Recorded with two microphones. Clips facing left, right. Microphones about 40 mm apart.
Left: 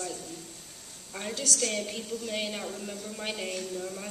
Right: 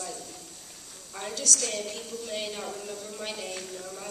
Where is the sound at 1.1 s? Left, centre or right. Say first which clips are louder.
Even; centre.